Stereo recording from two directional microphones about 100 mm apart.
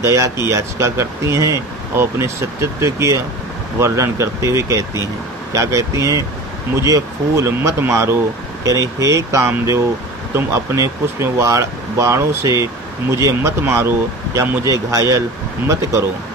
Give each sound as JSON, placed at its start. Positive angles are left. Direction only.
{"t": 0.0, "sound": "speech", "side_deg": -30}